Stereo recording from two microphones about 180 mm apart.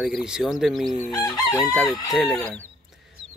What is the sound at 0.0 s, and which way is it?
Speech, 5° right (ahead or behind).